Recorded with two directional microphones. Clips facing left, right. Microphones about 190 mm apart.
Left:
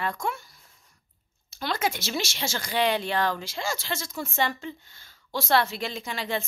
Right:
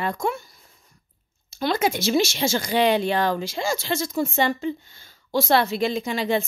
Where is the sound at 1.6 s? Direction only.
15° right (ahead or behind).